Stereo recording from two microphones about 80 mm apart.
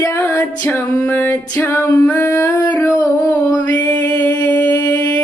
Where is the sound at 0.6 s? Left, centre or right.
Left.